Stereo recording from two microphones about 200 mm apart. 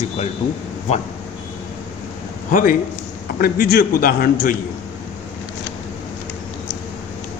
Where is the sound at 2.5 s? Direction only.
40° left (ahead or behind).